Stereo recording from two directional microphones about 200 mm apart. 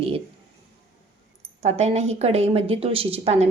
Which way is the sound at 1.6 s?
35° right (ahead or behind).